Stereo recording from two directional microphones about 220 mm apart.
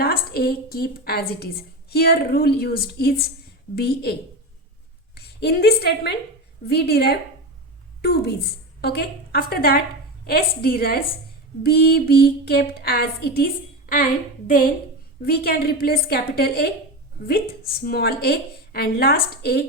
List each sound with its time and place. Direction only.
0.0 s a woman's voice: 45° left (ahead or behind)
17.8 s speech: 45° left (ahead or behind)